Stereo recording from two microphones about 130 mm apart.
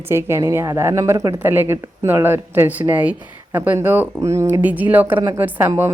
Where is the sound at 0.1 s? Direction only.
20° right (ahead or behind).